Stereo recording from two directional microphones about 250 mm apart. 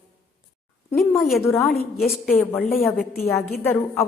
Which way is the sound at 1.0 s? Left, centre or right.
Centre.